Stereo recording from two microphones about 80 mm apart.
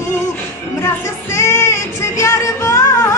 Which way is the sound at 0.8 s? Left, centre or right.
Left.